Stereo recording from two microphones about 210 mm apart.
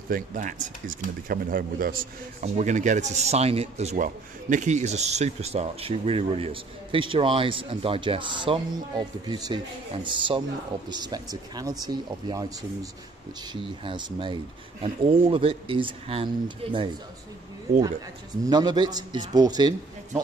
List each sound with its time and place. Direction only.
0.1 s speech: 40° right (ahead or behind)
18.4 s speech: 20° right (ahead or behind)